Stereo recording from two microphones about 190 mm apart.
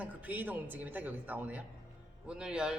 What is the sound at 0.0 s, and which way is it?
A woman's voice, 10° right (ahead or behind).